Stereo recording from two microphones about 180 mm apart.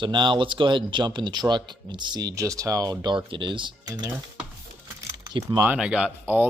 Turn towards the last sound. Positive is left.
turn(degrees=-10)  # may be behind; listen again after turning